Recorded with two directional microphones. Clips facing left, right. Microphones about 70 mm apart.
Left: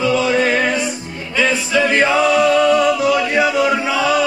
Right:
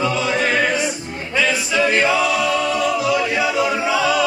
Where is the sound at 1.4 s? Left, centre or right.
Left.